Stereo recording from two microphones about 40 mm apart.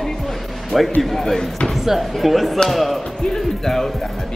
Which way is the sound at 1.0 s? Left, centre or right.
Centre.